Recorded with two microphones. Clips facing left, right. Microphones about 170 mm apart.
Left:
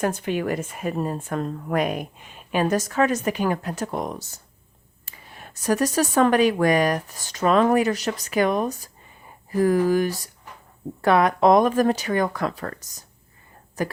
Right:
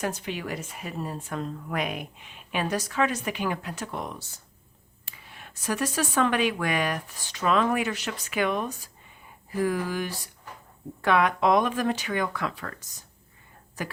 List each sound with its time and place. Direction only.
0.0 s a woman's voice: 50° left (ahead or behind)